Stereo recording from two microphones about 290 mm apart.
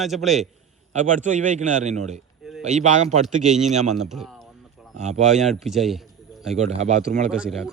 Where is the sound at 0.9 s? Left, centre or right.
Right.